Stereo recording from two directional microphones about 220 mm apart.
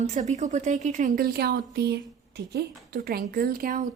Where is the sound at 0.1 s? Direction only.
30° right (ahead or behind).